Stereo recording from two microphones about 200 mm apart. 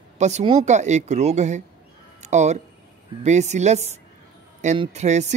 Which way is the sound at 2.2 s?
35° right (ahead or behind).